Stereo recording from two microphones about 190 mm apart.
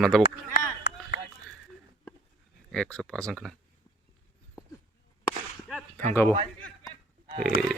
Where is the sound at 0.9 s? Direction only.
70° left (ahead or behind).